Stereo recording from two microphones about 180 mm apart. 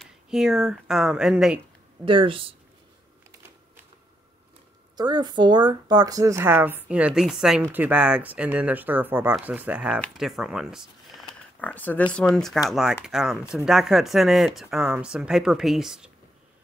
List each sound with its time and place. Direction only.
0.0 s speech: 5° right (ahead or behind)
2.0 s speech: 30° right (ahead or behind)
4.9 s speech: 25° right (ahead or behind); by 9.9 s 5° right (ahead or behind)
9.9 s speech: 5° left (ahead or behind)
11.6 s speech: 10° left (ahead or behind)